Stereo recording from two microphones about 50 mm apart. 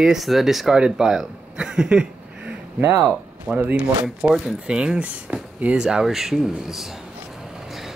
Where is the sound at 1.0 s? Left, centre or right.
Centre.